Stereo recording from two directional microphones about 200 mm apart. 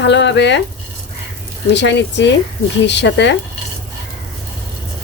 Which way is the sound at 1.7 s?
60° left (ahead or behind).